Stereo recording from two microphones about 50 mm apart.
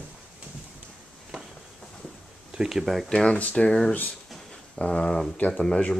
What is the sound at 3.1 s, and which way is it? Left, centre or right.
Speech, left.